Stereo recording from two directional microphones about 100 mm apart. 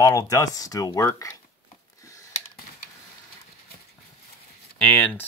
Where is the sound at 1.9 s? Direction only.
35° left (ahead or behind).